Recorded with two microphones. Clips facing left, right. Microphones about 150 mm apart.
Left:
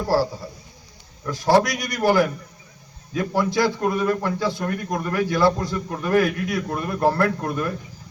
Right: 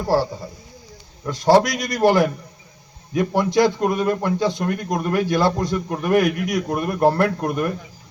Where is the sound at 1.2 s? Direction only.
25° right (ahead or behind).